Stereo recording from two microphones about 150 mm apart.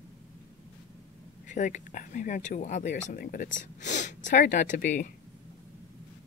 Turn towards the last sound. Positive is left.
turn(degrees=60)  # may be behind; listen again after turning